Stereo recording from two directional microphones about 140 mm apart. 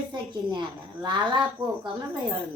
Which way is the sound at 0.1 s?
30° right (ahead or behind).